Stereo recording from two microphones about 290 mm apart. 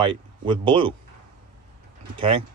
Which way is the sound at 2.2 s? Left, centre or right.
Centre.